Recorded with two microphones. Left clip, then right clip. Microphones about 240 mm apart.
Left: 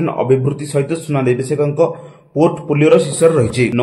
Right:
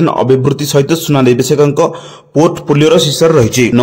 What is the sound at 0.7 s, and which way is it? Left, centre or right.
A man's voice, right.